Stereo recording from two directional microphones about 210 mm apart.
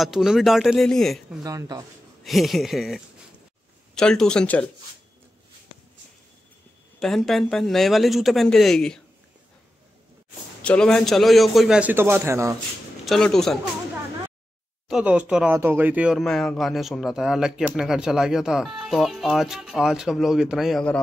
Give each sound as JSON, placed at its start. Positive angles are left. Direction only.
{"t": 0.0, "sound": "speech", "side_deg": 0}
{"t": 1.4, "sound": "speech", "side_deg": -15}
{"t": 2.2, "sound": "speech", "side_deg": 0}
{"t": 7.0, "sound": "speech", "side_deg": 0}
{"t": 10.6, "sound": "speech", "side_deg": 5}
{"t": 13.0, "sound": "speech", "side_deg": 0}
{"t": 14.9, "sound": "speech", "side_deg": -5}